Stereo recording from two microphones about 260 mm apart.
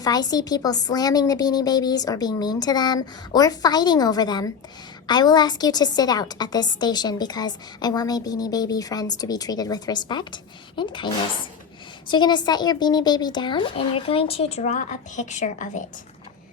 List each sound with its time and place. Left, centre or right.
0.0 s a woman's voice: centre